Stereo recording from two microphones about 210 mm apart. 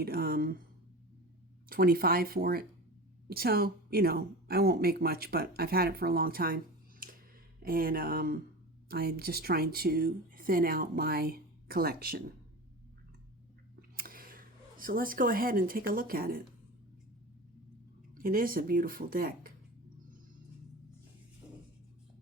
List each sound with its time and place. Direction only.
0.0 s a woman's voice: 45° right (ahead or behind)
1.7 s a woman's voice: 45° right (ahead or behind)
7.0 s a sound: 45° right (ahead or behind)
7.6 s a woman's voice: 45° right (ahead or behind)
13.9 s speech: 45° right (ahead or behind)
18.2 s a woman's voice: 45° right (ahead or behind)